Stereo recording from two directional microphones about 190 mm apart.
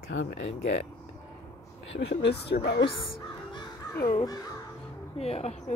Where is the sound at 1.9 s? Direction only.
65° left (ahead or behind).